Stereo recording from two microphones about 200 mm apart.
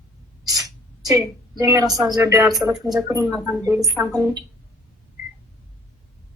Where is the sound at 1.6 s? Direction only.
20° right (ahead or behind).